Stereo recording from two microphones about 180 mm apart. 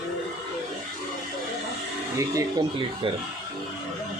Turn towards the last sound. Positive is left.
turn(degrees=-20)  # may be behind; listen again after turning